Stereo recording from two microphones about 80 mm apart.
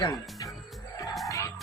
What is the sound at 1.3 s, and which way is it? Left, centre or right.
Music, left.